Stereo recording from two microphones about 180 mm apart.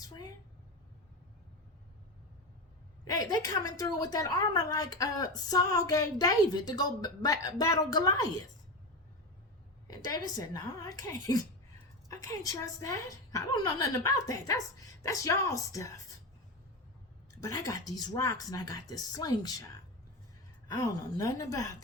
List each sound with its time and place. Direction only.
3.0 s a woman's voice: 20° left (ahead or behind)
9.8 s a woman's voice: 20° left (ahead or behind)
17.4 s a woman's voice: 20° left (ahead or behind)
20.7 s a woman's voice: 20° left (ahead or behind)